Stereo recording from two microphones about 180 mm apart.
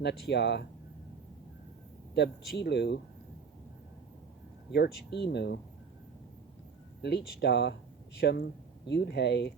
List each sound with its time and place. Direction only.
0.0 s speech: 70° left (ahead or behind)
2.1 s speech: 70° left (ahead or behind)
4.7 s speech: 70° left (ahead or behind)
7.0 s speech: 70° left (ahead or behind)